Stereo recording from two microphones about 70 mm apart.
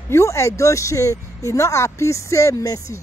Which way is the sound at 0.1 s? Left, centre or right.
Left.